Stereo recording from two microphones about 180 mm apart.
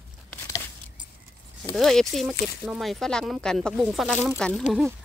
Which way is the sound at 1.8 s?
Centre (ahead or behind).